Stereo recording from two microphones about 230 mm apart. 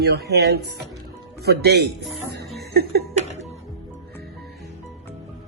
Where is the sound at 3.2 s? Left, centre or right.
Right.